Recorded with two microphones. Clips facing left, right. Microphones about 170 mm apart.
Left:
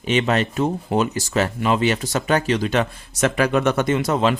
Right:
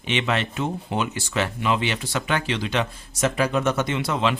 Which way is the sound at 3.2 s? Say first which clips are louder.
Left 3 dB; 65° left (ahead or behind).